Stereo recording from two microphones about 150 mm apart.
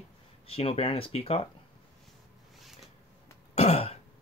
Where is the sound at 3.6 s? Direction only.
45° left (ahead or behind).